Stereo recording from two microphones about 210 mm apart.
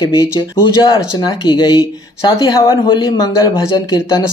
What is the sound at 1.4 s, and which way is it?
Speech, 20° left (ahead or behind).